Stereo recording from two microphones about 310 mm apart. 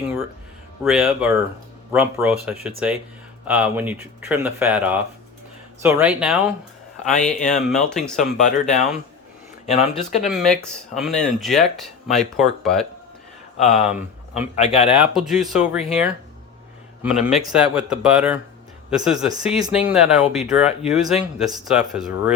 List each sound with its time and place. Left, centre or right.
0.9 s speech: centre
9.6 s speech: left
10.2 s speech: centre
13.6 s speech: left
13.9 s speech: centre
14.5 s speech: left
14.8 s speech: centre